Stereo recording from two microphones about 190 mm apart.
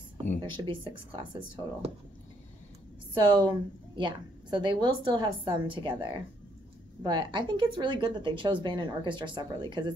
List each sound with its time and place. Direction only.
0.6 s a woman's voice: 25° right (ahead or behind)
3.2 s a woman's voice: 25° right (ahead or behind)